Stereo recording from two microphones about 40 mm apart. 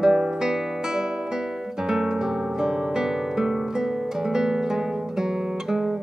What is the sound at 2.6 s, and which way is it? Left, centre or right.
Music, centre.